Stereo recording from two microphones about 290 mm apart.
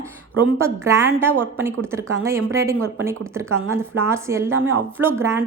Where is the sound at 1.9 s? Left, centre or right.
Centre.